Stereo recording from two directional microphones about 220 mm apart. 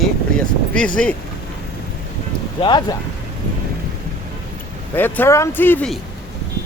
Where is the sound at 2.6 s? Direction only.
20° left (ahead or behind).